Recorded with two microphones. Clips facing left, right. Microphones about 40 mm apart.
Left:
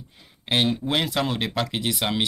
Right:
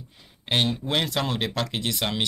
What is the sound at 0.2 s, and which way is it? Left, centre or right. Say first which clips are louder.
Speech: left 2 dB; centre.